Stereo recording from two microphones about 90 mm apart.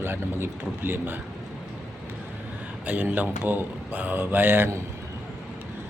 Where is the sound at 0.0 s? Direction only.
25° right (ahead or behind).